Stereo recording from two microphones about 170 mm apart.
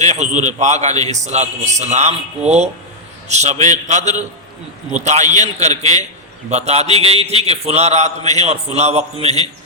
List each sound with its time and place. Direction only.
0.0 s a man's voice: 45° right (ahead or behind)
3.2 s a man's voice: 40° right (ahead or behind)